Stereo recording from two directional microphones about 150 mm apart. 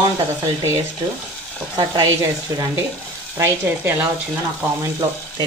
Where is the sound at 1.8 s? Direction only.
20° right (ahead or behind).